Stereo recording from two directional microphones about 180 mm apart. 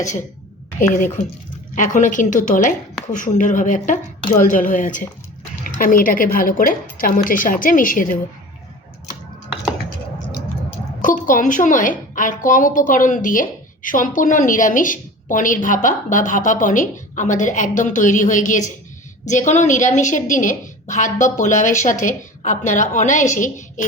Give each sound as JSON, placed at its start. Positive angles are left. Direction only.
{"t": 0.8, "sound": "a woman's voice", "side_deg": 45}
{"t": 11.0, "sound": "a woman's voice", "side_deg": 45}